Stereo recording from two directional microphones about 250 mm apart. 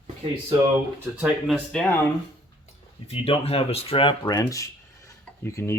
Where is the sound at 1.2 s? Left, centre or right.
Centre.